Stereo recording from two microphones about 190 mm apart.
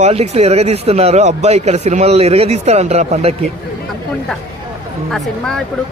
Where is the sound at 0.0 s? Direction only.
35° right (ahead or behind).